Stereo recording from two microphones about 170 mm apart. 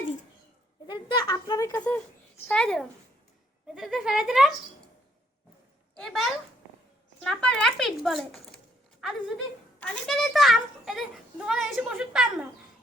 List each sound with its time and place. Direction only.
0.9 s a sound: 30° left (ahead or behind)
1.7 s a child's voice: 10° left (ahead or behind)
6.0 s a child's voice: centre (ahead or behind)